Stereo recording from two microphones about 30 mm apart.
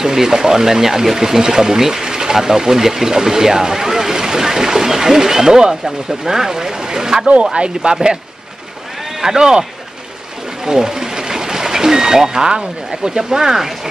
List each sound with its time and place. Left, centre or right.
0.0 s speech: centre
7.5 s speech: right
9.4 s speech: right
10.6 s vehicle: right
13.2 s speech: centre